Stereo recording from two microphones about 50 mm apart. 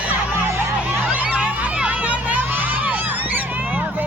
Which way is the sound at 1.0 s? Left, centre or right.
Right.